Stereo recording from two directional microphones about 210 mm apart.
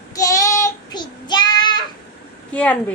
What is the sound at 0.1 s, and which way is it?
Child singing, 15° left (ahead or behind).